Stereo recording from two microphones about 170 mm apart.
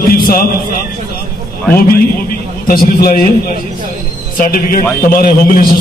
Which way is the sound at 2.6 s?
60° left (ahead or behind).